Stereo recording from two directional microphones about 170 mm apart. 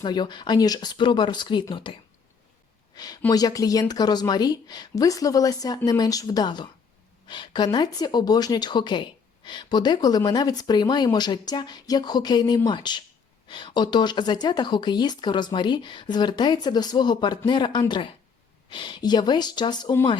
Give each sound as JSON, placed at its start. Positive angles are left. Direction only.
{"t": 0.0, "sound": "speech", "side_deg": 25}